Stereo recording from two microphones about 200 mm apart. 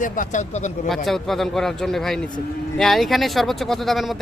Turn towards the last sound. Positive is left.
turn(degrees=0)  # may be behind; listen again after turning